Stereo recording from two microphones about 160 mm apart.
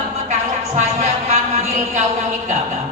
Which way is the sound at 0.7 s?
45° right (ahead or behind).